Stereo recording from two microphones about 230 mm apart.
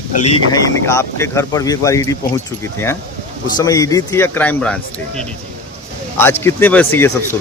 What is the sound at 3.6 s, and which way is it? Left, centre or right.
Speech, centre.